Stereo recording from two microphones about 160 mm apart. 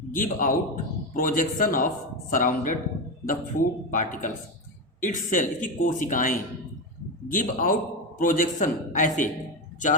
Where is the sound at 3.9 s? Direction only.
55° left (ahead or behind).